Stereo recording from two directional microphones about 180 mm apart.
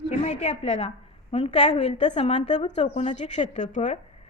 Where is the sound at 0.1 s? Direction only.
40° left (ahead or behind).